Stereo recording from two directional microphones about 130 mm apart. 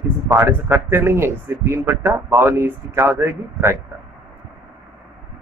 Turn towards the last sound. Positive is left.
turn(degrees=-20)  # may be behind; listen again after turning